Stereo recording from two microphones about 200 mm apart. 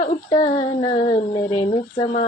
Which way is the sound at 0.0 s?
25° left (ahead or behind).